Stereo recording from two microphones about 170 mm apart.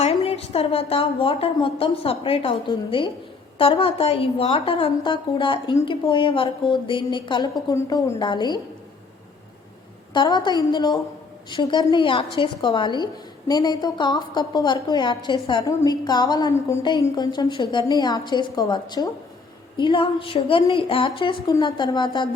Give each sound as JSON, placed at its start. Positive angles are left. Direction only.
{"t": 0.0, "sound": "a woman's voice", "side_deg": 35}
{"t": 10.2, "sound": "a woman's voice", "side_deg": 25}